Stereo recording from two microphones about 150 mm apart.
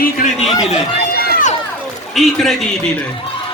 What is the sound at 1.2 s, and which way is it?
Run, 85° left.